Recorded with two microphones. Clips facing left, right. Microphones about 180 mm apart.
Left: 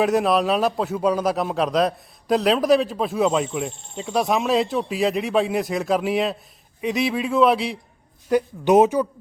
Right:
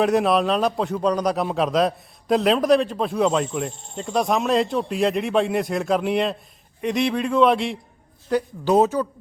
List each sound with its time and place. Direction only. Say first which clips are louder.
0.0 s a man's voice: even; centre (ahead or behind)
8.3 s speech: left 3 dB; 15° left (ahead or behind)